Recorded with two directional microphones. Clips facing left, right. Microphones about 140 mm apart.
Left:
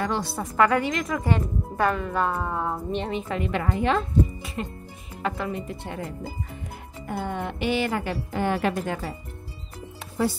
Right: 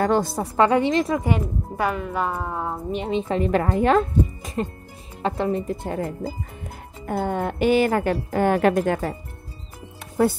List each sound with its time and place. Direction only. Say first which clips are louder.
0.0 s a woman's voice: right 7 dB; 45° right (ahead or behind)
0.6 s speech: right 4 dB; 25° right (ahead or behind)
1.2 s speech: right 2 dB; 10° right (ahead or behind)
3.1 s speech: right 6 dB; 30° right (ahead or behind)
3.6 s speech: right 3 dB; 50° right (ahead or behind)
5.2 s a woman's voice: right 6 dB; 35° right (ahead or behind); by 9.1 s 55° right (ahead or behind)
10.2 s a woman's voice: right 5 dB; 50° right (ahead or behind)